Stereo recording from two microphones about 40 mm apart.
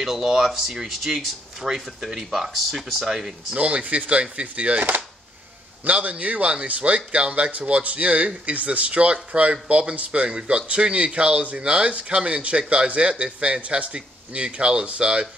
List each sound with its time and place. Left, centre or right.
0.0 s speech: centre
3.5 s speech: right